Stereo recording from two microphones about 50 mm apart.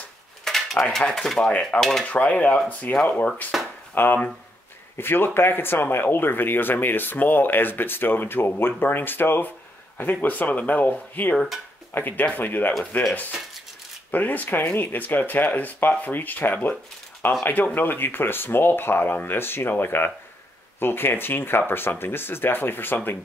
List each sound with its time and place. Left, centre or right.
0.5 s cutlery: centre
1.1 s speech: centre
2.0 s cutlery: left
3.9 s speech: left
14.1 s speech: left